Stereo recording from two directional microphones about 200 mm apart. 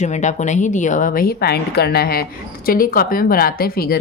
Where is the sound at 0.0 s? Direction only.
35° left (ahead or behind).